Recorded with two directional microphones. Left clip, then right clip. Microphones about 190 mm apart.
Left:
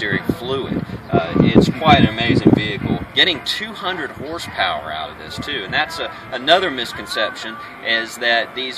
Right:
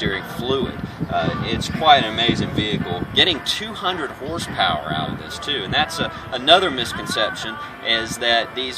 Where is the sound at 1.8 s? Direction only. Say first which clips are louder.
Right 4 dB; 5° left (ahead or behind).